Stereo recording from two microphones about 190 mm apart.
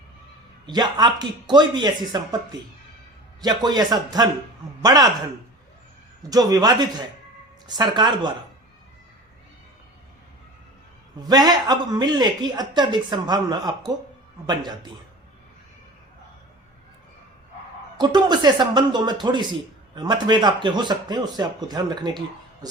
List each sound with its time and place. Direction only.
0.6 s a man's voice: 20° right (ahead or behind)
6.3 s speech: 20° right (ahead or behind)
11.3 s speech: 20° right (ahead or behind)
17.9 s speech: 20° right (ahead or behind)